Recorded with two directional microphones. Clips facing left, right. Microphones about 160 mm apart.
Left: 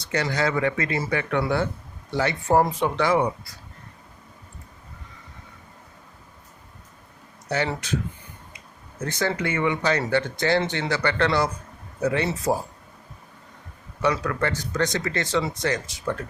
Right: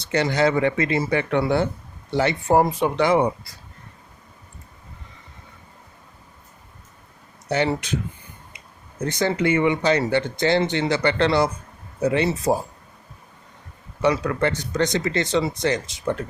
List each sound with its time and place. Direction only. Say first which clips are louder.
0.0 s speech: right 5 dB; 25° right (ahead or behind)
2.5 s speech: right 1 dB; 10° right (ahead or behind)
7.7 s speech: right 5 dB; 15° right (ahead or behind)
9.0 s speech: right 5 dB; 20° right (ahead or behind)
14.0 s speech: right 3 dB; 20° right (ahead or behind)